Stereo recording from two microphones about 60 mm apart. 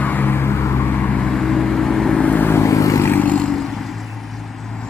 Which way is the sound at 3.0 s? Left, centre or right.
Left.